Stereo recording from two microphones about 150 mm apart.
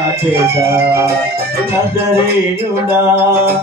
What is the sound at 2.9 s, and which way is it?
Music, 15° right (ahead or behind).